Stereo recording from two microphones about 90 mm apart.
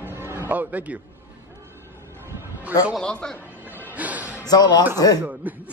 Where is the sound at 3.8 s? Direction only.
15° right (ahead or behind).